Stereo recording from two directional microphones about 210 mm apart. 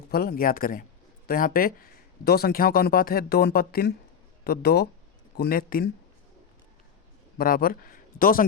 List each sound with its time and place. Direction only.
0.1 s speech: 45° left (ahead or behind)
7.3 s speech: 45° left (ahead or behind)